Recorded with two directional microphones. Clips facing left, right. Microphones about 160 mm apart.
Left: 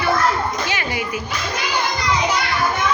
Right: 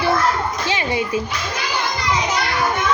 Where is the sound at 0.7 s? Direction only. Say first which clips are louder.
Right 3 dB; 25° right (ahead or behind).